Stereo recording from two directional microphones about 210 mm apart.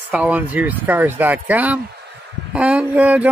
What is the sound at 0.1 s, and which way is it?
Speech, 5° right (ahead or behind).